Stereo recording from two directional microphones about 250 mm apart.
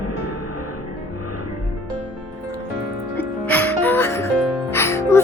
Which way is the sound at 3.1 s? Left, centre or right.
Centre.